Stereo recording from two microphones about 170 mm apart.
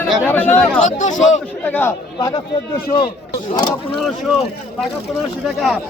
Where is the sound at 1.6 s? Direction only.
10° left (ahead or behind).